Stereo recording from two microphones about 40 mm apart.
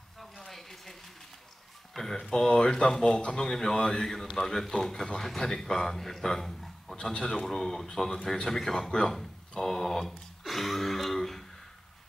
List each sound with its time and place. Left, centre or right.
0.5 s a sound: centre
2.0 s speech: centre
7.0 s speech: centre
10.4 s throat clearing: centre